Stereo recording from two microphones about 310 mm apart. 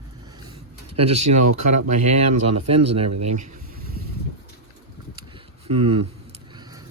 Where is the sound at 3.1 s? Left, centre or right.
Right.